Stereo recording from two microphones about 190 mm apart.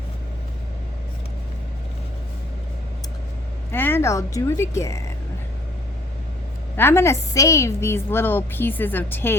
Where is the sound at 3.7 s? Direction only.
10° left (ahead or behind).